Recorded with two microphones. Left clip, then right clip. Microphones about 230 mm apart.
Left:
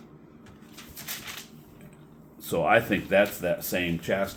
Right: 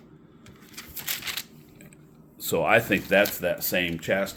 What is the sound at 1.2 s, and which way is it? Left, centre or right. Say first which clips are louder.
Coin: right 7 dB; right.